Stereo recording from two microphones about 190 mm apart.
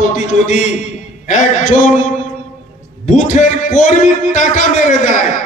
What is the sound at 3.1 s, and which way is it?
A man's voice, 40° left (ahead or behind).